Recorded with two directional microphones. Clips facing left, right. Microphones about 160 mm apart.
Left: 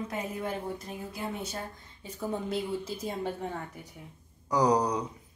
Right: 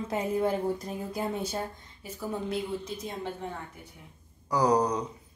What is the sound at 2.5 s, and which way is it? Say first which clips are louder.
Speech: even; 5° left (ahead or behind).